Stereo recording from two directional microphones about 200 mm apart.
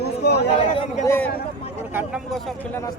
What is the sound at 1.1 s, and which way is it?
Speech, 10° left (ahead or behind).